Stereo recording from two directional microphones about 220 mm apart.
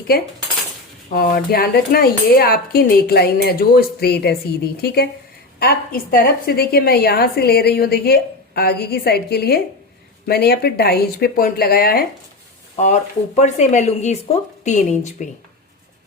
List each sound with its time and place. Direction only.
1.1 s a woman's voice: 40° left (ahead or behind)
12.7 s speech: 30° left (ahead or behind)